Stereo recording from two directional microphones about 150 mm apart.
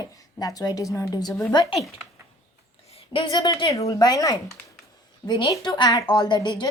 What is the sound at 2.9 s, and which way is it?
Speech, 35° left (ahead or behind).